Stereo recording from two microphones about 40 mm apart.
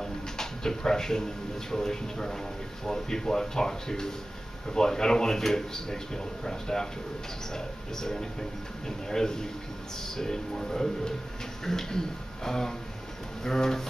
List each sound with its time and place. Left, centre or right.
0.0 s drawer open or close: centre
1.7 s speech: centre